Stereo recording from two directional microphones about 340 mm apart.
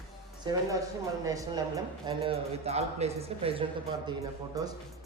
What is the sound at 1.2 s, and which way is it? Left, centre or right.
A man's voice, centre.